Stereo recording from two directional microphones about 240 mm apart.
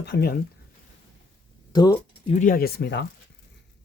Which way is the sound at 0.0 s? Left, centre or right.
Left.